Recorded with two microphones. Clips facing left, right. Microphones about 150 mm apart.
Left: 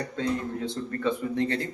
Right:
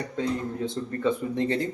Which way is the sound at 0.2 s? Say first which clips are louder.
Right 1 dB; 20° right (ahead or behind).